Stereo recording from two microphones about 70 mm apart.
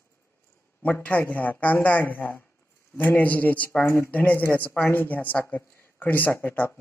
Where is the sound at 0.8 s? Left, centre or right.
Left.